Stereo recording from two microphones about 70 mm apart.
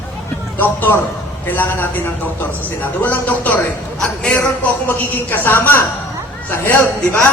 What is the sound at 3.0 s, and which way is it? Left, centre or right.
Speech, left.